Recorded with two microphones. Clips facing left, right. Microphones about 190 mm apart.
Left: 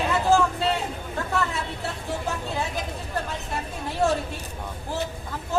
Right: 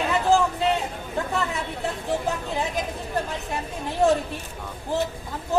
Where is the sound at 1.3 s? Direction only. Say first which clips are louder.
Left 2 dB; 15° right (ahead or behind).